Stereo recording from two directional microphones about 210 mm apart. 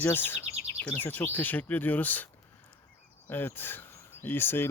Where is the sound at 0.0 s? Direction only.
10° left (ahead or behind).